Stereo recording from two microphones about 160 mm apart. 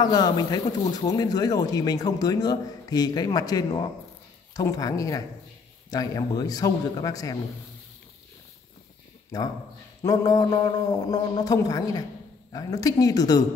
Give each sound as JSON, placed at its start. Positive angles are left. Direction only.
{"t": 0.0, "sound": "speech", "side_deg": 25}
{"t": 9.3, "sound": "speech", "side_deg": 25}